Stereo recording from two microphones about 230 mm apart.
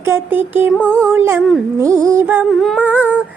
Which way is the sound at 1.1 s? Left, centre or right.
Centre.